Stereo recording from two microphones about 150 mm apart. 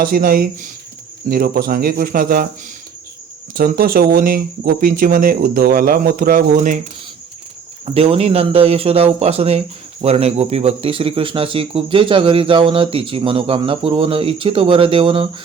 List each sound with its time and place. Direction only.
0.0 s speech: 70° right (ahead or behind)
3.5 s speech: 70° right (ahead or behind)
7.9 s speech: 40° right (ahead or behind)